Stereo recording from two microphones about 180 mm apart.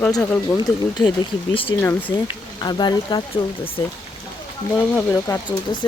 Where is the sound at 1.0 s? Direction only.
25° left (ahead or behind).